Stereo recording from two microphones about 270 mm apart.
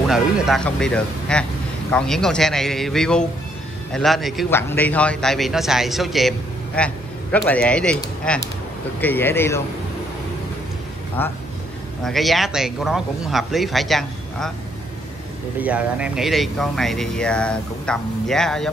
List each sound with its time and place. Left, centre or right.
0.1 s speech: centre
11.2 s speech: centre
15.6 s speech: centre